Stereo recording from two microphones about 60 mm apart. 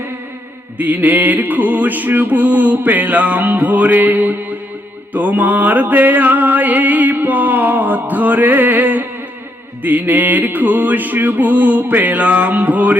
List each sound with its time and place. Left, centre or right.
0.8 s music: right